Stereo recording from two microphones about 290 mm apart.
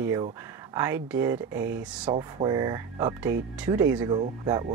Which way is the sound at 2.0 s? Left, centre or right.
Centre.